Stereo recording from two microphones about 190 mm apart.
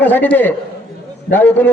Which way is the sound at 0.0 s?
10° left (ahead or behind).